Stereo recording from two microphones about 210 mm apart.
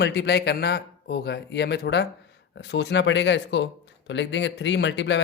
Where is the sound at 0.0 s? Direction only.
55° left (ahead or behind).